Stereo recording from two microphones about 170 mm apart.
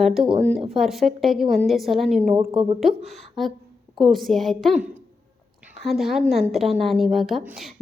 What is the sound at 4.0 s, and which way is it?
A woman's voice, centre (ahead or behind).